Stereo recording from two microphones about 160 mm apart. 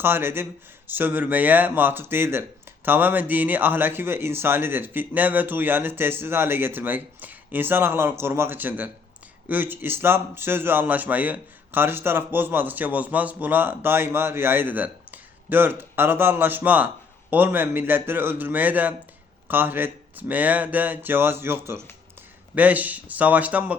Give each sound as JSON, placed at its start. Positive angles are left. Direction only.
{"t": 0.0, "sound": "a man's voice", "side_deg": -15}